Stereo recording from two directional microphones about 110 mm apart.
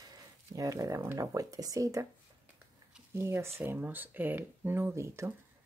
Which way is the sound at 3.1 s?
25° right (ahead or behind).